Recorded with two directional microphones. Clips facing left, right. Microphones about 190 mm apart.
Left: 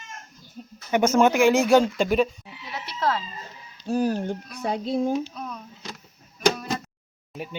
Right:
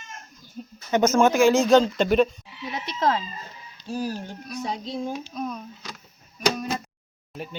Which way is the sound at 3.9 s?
55° left (ahead or behind).